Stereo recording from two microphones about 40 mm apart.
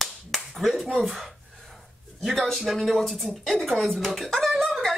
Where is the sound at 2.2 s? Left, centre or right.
Centre.